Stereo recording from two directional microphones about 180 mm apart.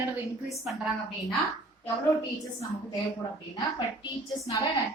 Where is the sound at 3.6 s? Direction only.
25° left (ahead or behind).